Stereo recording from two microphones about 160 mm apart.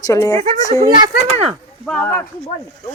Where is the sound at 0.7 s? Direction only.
30° right (ahead or behind).